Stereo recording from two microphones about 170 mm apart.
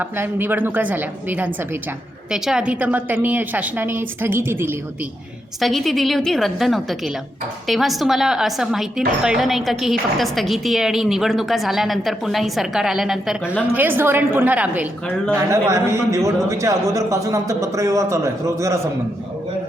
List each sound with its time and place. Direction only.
0.0 s a man's voice: 10° right (ahead or behind)
5.5 s a woman's voice: centre (ahead or behind)
13.4 s a woman's voice: 10° left (ahead or behind)
13.7 s a man's voice: 10° right (ahead or behind)